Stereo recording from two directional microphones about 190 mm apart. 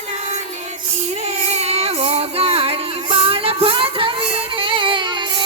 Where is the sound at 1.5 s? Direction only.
35° right (ahead or behind).